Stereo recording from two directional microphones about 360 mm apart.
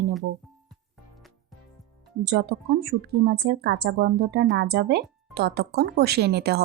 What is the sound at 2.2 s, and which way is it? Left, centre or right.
Speech, right.